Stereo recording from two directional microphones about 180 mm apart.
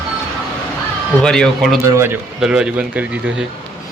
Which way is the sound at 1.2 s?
5° left (ahead or behind).